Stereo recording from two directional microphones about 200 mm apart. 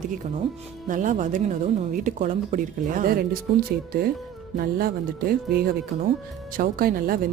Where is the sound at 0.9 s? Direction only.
40° right (ahead or behind).